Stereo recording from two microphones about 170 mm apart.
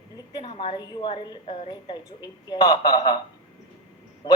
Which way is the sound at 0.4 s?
35° left (ahead or behind).